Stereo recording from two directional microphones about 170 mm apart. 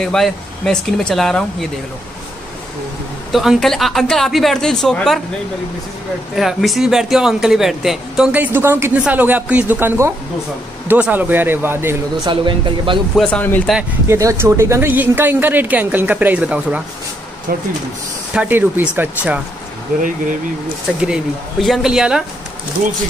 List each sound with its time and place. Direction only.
0.0 s speech: centre (ahead or behind)
3.3 s speech: centre (ahead or behind)
6.3 s speech: centre (ahead or behind)
12.3 s speech: 30° right (ahead or behind)
13.1 s speech: 5° left (ahead or behind)
14.0 s speech: 15° right (ahead or behind)
17.5 s speech: 60° right (ahead or behind)
18.3 s speech: 10° right (ahead or behind)
21.0 s speech: centre (ahead or behind)